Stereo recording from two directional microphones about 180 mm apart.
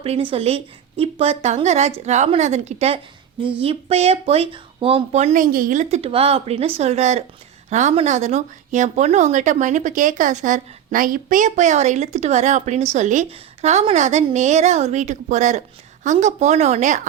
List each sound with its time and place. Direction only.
0.0 s speech: 30° right (ahead or behind)